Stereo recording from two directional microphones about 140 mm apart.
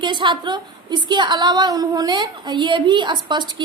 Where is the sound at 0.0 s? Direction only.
35° right (ahead or behind).